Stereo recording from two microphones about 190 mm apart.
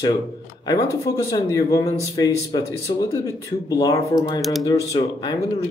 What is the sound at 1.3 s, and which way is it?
Speech, 20° left (ahead or behind).